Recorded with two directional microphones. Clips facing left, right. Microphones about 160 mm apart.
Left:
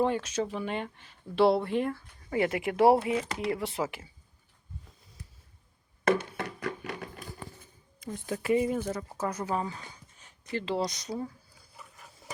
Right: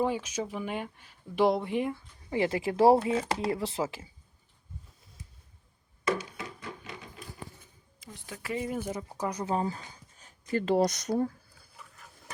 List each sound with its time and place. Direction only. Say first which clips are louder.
0.0 s speech: left 2 dB; 10° right (ahead or behind); by 4.1 s 25° right (ahead or behind)
6.1 s a sound: left 4 dB; 60° left (ahead or behind)
8.0 s speech: left 10 dB; 50° left (ahead or behind)
8.7 s speech: left 2 dB; 15° right (ahead or behind)
9.6 s speech: right 2 dB; 35° right (ahead or behind); by 11.3 s 50° right (ahead or behind)